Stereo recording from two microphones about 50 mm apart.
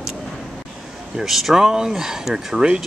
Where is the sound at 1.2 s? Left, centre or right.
Centre.